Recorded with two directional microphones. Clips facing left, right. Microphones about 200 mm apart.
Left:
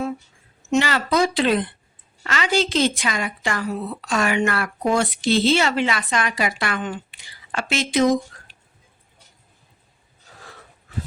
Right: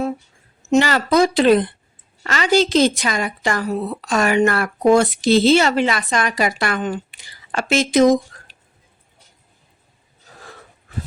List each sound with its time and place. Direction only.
0.7 s a woman's voice: 40° right (ahead or behind)